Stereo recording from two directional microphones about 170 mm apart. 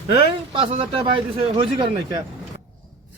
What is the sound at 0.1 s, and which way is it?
Speech, 35° right (ahead or behind).